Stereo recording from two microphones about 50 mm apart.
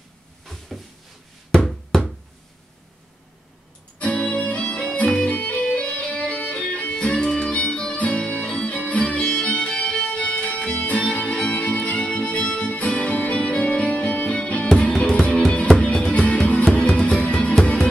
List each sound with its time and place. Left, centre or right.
0.5 s cupboard open or close: centre
4.0 s music: left
5.6 s music: centre